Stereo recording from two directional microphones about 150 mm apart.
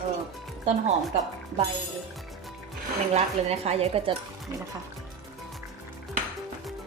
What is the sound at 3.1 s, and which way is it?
Speech, 45° right (ahead or behind).